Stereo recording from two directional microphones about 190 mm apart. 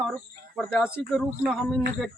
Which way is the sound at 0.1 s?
5° left (ahead or behind).